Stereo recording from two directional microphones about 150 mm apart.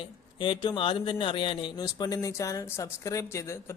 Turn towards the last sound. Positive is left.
turn(degrees=20)  # may be behind; listen again after turning